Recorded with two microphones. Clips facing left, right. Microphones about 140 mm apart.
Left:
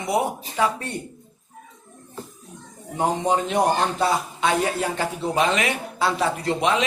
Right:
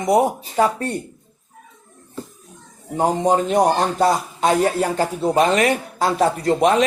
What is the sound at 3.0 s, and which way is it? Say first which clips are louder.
A man's voice: right 4 dB; 40° right (ahead or behind).